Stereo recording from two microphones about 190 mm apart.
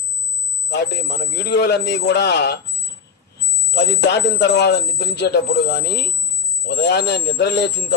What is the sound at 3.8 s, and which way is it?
A man's voice, 65° left (ahead or behind).